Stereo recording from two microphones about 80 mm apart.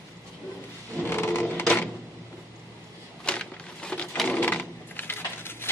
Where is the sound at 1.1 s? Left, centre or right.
Left.